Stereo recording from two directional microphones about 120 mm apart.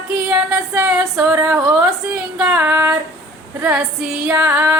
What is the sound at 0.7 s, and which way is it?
Female singing, 10° right (ahead or behind).